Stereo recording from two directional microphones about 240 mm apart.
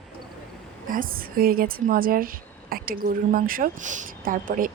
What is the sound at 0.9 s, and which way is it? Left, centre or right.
Speech, right.